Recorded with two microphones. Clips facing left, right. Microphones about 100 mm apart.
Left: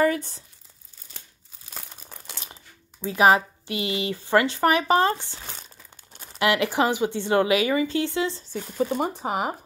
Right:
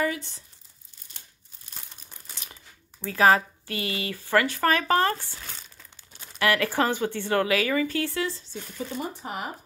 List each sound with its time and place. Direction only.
0.0 s speech: 40° left (ahead or behind)
2.3 s coin: 30° left (ahead or behind)
3.0 s speech: 20° left (ahead or behind)
6.1 s crumpling: 40° left (ahead or behind)
6.4 s speech: 20° left (ahead or behind)
8.7 s speech: 55° left (ahead or behind)
9.2 s speech: 90° left